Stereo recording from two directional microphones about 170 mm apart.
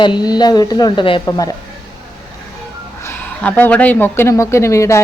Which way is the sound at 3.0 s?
15° left (ahead or behind).